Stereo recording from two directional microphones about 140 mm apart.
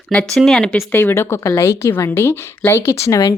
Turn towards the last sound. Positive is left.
turn(degrees=20)  # may be behind; listen again after turning